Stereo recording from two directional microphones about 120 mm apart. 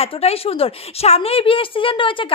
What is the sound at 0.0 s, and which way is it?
A woman's voice, 60° left (ahead or behind).